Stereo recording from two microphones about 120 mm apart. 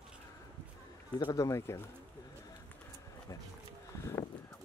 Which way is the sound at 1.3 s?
20° left (ahead or behind).